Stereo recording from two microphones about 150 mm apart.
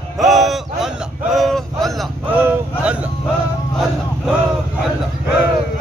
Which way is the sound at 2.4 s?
10° right (ahead or behind).